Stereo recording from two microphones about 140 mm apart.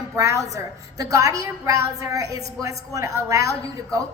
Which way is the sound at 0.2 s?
25° right (ahead or behind).